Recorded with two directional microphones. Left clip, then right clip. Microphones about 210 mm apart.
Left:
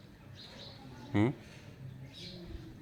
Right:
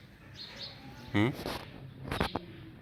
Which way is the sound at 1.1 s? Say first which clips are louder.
Right 1 dB; 5° left (ahead or behind).